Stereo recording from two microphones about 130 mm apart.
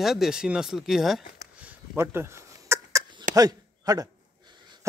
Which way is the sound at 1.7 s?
20° right (ahead or behind).